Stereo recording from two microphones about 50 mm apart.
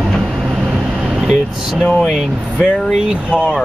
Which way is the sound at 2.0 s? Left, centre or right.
Centre.